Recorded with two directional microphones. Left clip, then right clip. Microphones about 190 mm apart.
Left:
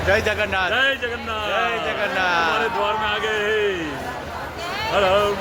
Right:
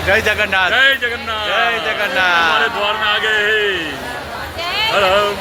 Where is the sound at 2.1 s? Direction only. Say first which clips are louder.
Right 7 dB; 10° right (ahead or behind).